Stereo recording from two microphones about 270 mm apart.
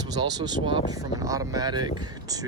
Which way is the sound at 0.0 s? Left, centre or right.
Centre.